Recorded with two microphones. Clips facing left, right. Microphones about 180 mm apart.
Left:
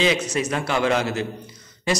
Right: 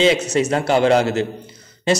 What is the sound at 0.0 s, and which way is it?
A man's voice, 25° right (ahead or behind).